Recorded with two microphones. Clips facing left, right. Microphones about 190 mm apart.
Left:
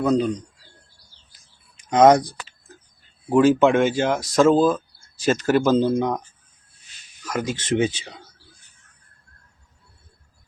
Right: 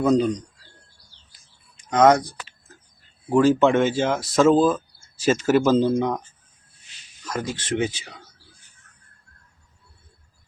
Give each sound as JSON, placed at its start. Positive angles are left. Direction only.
{"t": 0.0, "sound": "speech", "side_deg": 0}
{"t": 1.9, "sound": "speech", "side_deg": 20}
{"t": 3.2, "sound": "speech", "side_deg": 5}
{"t": 7.3, "sound": "speech", "side_deg": 15}